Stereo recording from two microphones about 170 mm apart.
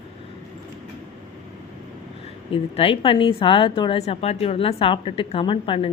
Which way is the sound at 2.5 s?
35° left (ahead or behind).